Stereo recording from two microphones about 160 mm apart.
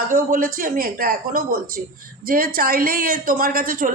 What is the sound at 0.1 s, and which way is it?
A woman's voice, 60° right (ahead or behind).